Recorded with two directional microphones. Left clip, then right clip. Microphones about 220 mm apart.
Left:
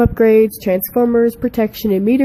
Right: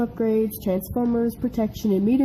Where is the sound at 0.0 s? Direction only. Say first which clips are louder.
Left 12 dB; 45° left (ahead or behind).